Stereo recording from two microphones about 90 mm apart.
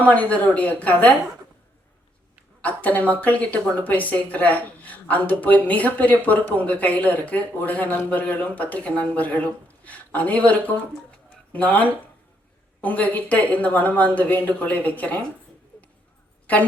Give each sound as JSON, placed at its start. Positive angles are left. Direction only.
{"t": 0.0, "sound": "speech", "side_deg": 15}
{"t": 2.6, "sound": "speech", "side_deg": 15}